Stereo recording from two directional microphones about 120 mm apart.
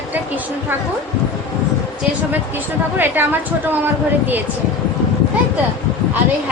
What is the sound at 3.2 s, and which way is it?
Speech, 15° right (ahead or behind).